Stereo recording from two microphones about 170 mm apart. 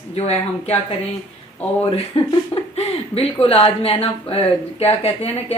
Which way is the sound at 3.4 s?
35° left (ahead or behind).